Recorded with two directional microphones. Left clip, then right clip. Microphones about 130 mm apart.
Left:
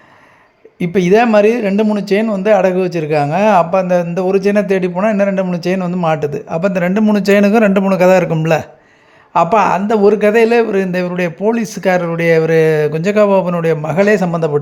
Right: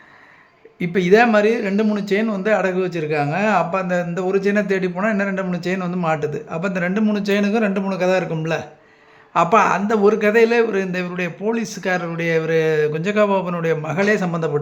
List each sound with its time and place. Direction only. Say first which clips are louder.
0.8 s speech: left 3 dB; 35° left (ahead or behind)
7.1 s speech: left 12 dB; 65° left (ahead or behind)
9.3 s speech: left 4 dB; 35° left (ahead or behind)